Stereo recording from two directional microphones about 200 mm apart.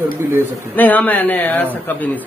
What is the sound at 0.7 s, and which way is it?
Speech, 10° left (ahead or behind).